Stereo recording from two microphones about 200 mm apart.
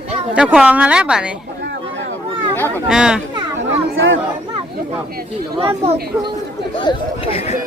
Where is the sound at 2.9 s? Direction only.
5° right (ahead or behind).